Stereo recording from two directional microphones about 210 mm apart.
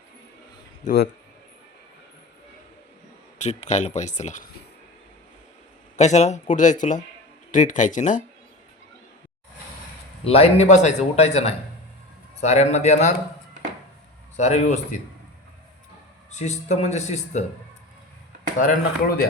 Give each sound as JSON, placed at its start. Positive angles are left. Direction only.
{"t": 3.4, "sound": "speech", "side_deg": 35}
{"t": 6.0, "sound": "speech", "side_deg": 35}
{"t": 10.2, "sound": "speech", "side_deg": 30}
{"t": 14.3, "sound": "speech", "side_deg": 30}
{"t": 16.3, "sound": "speech", "side_deg": 30}
{"t": 18.6, "sound": "speech", "side_deg": 40}